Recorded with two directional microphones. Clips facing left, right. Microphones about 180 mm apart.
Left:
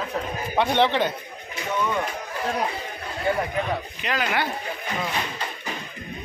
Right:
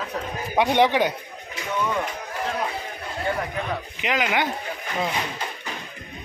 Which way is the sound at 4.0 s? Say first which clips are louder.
Right 4 dB; 15° right (ahead or behind).